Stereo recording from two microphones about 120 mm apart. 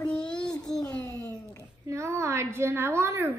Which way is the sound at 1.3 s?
15° left (ahead or behind).